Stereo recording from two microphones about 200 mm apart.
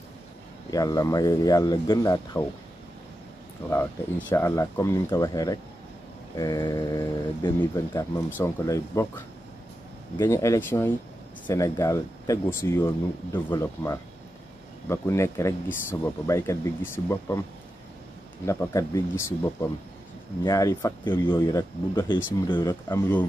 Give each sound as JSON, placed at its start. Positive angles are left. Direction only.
{"t": 0.7, "sound": "speech", "side_deg": 15}
{"t": 3.7, "sound": "speech", "side_deg": 10}
{"t": 18.4, "sound": "speech", "side_deg": 15}